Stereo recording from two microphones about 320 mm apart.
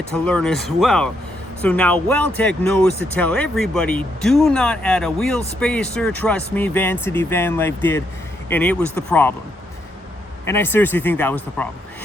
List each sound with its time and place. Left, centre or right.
0.1 s speech: centre
10.4 s speech: centre